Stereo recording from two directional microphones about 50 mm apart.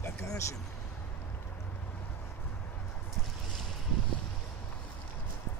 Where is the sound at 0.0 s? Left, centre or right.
Left.